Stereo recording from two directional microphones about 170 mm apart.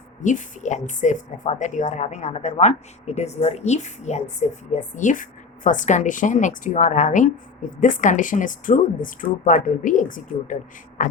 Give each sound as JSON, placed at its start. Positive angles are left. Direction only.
{"t": 0.2, "sound": "speech", "side_deg": 45}